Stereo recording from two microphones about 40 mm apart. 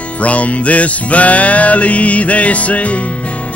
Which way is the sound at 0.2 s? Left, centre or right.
Left.